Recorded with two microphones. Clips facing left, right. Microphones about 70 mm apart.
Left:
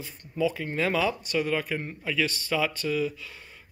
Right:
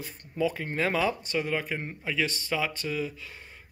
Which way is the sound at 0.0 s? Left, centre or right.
Right.